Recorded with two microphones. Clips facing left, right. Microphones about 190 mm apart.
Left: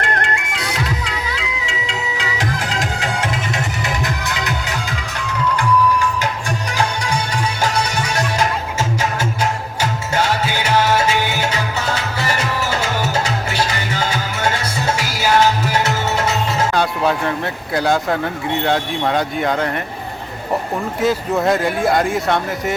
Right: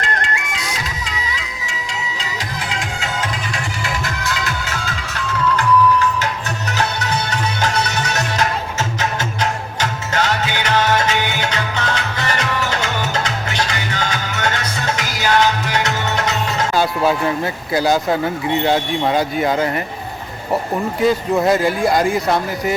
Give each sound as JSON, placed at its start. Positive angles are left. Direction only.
{"t": 0.0, "sound": "music", "side_deg": 60}
{"t": 2.7, "sound": "music", "side_deg": 35}
{"t": 3.5, "sound": "music", "side_deg": 20}
{"t": 6.7, "sound": "music", "side_deg": 10}
{"t": 16.7, "sound": "speech", "side_deg": -5}
{"t": 21.0, "sound": "speech", "side_deg": 0}